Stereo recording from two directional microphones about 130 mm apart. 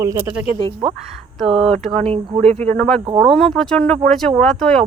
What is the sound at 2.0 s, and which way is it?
Speech, 45° right (ahead or behind).